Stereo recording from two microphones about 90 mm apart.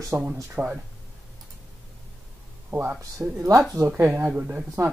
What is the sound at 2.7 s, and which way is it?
Speech, 25° right (ahead or behind).